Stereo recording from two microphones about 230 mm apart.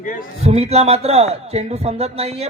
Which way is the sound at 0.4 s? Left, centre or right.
Right.